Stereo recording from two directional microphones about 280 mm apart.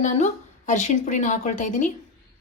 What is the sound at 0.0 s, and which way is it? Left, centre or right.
Speech, left.